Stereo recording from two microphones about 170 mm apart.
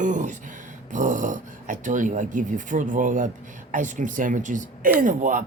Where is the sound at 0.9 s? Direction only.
45° right (ahead or behind).